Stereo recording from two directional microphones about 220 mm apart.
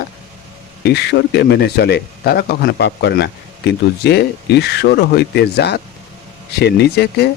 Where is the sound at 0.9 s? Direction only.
50° left (ahead or behind).